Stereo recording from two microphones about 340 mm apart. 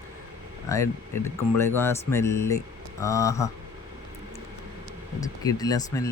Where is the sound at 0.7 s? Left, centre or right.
Centre.